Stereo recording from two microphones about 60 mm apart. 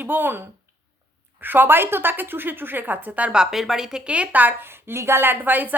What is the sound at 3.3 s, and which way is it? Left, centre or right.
A woman's voice, centre.